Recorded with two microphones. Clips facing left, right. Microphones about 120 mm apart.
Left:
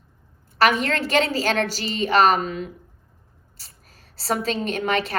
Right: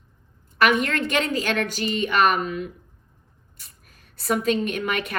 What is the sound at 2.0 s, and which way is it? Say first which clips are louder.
Speech: left 3 dB; 35° left (ahead or behind).